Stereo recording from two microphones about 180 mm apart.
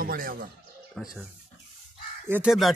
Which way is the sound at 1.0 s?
Centre (ahead or behind).